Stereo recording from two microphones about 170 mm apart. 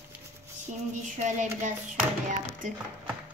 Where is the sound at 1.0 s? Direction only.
45° right (ahead or behind).